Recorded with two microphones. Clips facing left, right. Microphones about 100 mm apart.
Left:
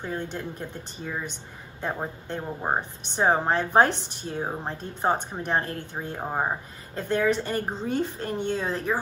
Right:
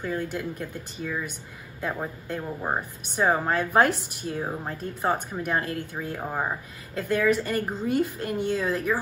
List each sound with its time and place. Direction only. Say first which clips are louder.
0.0 s a woman's voice: right 2 dB; 25° left (ahead or behind)